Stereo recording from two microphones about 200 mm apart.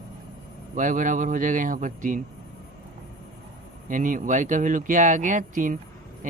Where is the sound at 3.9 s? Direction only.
40° right (ahead or behind).